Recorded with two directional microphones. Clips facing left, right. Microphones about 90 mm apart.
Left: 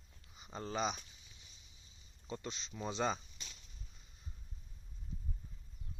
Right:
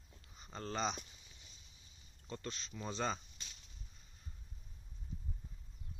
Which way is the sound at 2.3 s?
15° left (ahead or behind).